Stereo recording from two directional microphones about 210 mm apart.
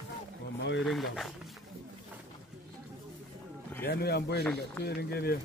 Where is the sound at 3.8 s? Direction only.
50° left (ahead or behind).